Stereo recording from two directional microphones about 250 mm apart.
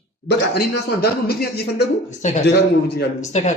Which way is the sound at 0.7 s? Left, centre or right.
Left.